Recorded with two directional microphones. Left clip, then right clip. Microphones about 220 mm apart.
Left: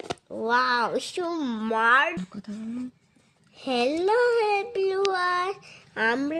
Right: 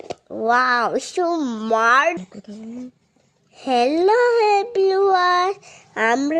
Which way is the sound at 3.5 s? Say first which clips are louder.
Right 7 dB; 15° right (ahead or behind).